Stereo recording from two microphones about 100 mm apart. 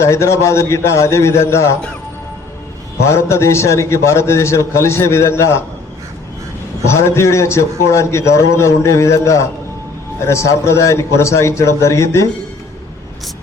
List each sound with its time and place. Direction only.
0.0 s a man's voice: 25° left (ahead or behind)
3.1 s a man's voice: 30° left (ahead or behind)
6.8 s a man's voice: 25° left (ahead or behind)